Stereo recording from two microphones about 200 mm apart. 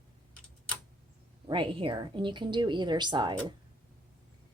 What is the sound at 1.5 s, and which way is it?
A woman's voice, 25° right (ahead or behind).